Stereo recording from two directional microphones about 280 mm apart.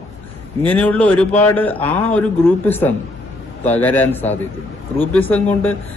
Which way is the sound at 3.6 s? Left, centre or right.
Centre.